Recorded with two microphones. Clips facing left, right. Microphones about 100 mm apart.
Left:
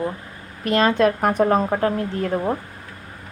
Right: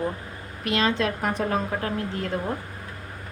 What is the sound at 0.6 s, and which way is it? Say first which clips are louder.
A woman's voice: left 7 dB; 45° left (ahead or behind).